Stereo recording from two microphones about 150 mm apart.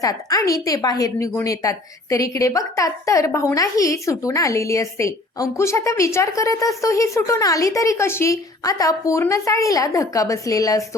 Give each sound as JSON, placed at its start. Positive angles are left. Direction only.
{"t": 0.0, "sound": "a woman's voice", "side_deg": 25}